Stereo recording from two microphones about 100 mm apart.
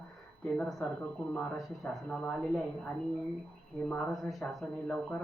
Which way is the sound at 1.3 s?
5° left (ahead or behind).